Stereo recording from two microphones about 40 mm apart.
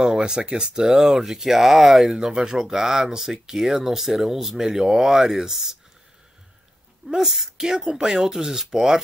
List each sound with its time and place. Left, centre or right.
0.0 s a sound: centre
0.5 s speech: centre
2.1 s speech: centre
7.1 s speech: centre